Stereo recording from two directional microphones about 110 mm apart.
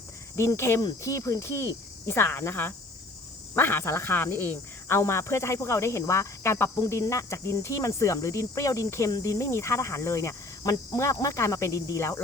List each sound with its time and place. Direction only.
0.3 s speech: 25° left (ahead or behind)